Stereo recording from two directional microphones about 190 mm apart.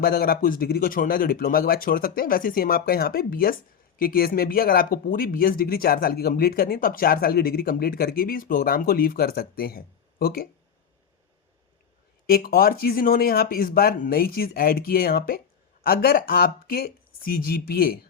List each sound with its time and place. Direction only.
0.0 s speech: 50° left (ahead or behind)
12.2 s speech: 50° left (ahead or behind)